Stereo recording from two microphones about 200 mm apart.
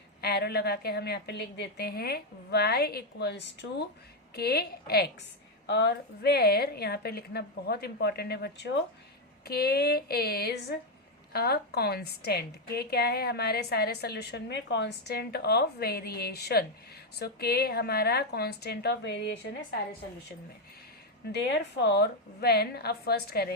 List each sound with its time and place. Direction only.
0.2 s a woman's voice: 55° left (ahead or behind)
21.3 s a woman's voice: 55° left (ahead or behind)